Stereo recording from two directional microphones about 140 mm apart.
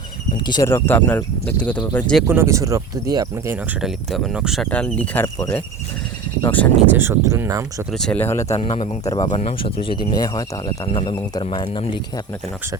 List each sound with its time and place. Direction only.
0.4 s speech: 30° left (ahead or behind)
0.7 s speech: 15° left (ahead or behind)
2.2 s speech: 15° right (ahead or behind)
3.8 s speech: centre (ahead or behind)
4.7 s speech: 10° left (ahead or behind)
5.2 s cricket: 25° left (ahead or behind)
6.4 s speech: 15° left (ahead or behind)
6.9 s speech: 15° right (ahead or behind)
7.9 s speech: 5° left (ahead or behind)
8.2 s cricket: 20° left (ahead or behind)
8.5 s speech: 45° left (ahead or behind)
9.1 s speech: 35° left (ahead or behind)
9.4 s speech: 45° left (ahead or behind)